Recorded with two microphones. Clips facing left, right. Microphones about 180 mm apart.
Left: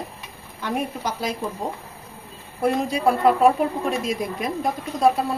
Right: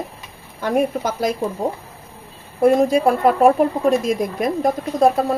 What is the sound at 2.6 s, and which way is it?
Speech, 50° right (ahead or behind).